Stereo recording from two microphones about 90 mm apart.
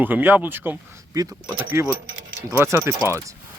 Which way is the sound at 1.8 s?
30° right (ahead or behind).